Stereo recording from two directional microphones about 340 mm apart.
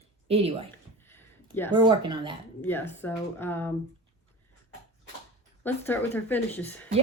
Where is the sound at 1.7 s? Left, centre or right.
Centre.